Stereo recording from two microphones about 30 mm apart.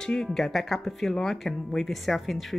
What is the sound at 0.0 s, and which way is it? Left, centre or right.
Speech, centre.